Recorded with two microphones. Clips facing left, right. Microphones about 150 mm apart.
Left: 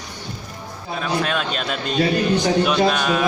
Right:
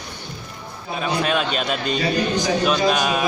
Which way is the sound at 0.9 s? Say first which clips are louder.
Right 1 dB; 5° right (ahead or behind).